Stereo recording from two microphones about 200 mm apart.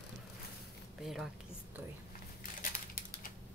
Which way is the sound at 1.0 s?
Centre (ahead or behind).